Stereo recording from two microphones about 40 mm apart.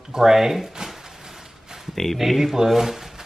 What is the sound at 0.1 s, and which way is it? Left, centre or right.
Speech, centre.